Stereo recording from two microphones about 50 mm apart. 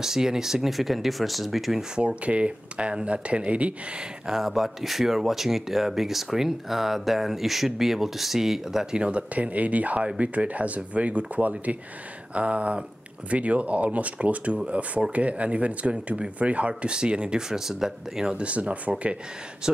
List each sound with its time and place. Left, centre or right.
0.0 s speech: centre
2.0 s speech: right
4.3 s speech: centre
8.9 s speech: right
18.3 s speech: right
19.6 s speech: centre